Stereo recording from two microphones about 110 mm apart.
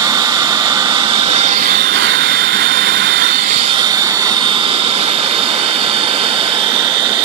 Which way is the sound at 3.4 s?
85° right.